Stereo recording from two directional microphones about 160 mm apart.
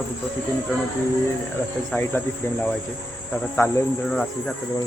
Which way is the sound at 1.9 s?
15° left (ahead or behind).